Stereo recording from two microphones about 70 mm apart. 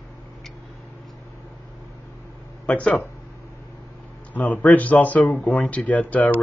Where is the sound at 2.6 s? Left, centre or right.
Centre.